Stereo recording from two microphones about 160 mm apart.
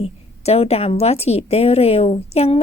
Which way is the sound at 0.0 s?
40° left (ahead or behind).